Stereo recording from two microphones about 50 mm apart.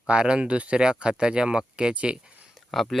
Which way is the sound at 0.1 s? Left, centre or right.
Right.